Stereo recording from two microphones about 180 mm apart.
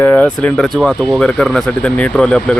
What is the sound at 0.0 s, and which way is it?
Speech, 10° left (ahead or behind).